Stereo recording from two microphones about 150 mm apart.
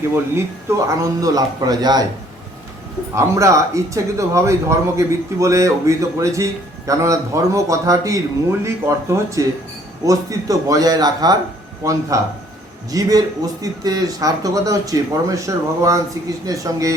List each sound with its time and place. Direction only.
0.3 s speech: 20° right (ahead or behind)
3.2 s speech: 20° right (ahead or behind)